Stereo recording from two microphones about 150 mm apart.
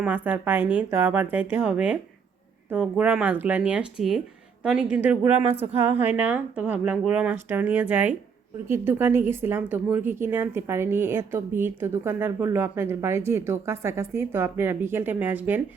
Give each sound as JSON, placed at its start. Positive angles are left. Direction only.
{"t": 0.0, "sound": "speech", "side_deg": -10}